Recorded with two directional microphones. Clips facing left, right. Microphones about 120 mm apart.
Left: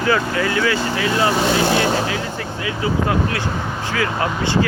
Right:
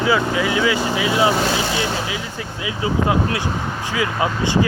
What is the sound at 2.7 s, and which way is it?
Speech, 15° right (ahead or behind).